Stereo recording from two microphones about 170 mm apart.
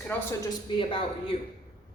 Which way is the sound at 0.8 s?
30° left (ahead or behind).